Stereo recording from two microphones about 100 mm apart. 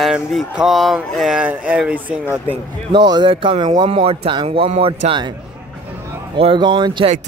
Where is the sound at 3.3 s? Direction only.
60° right (ahead or behind).